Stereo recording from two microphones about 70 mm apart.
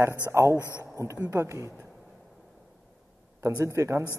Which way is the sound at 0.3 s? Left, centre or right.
Right.